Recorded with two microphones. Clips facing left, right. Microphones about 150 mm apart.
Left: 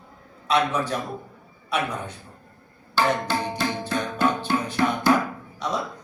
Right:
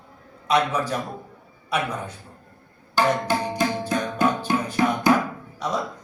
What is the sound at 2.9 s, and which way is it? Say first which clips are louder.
Music: right 2 dB; 15° right (ahead or behind).